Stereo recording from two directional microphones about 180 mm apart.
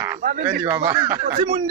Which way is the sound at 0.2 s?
45° right (ahead or behind).